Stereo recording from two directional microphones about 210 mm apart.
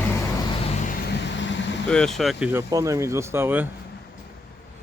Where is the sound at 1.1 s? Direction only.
55° left (ahead or behind).